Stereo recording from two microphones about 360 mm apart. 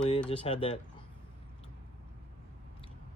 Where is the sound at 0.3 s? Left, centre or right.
Centre.